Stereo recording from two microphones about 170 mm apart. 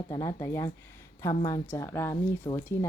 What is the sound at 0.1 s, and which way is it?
Speech, 20° left (ahead or behind).